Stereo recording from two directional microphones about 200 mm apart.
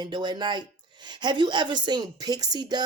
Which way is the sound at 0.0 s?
20° right (ahead or behind).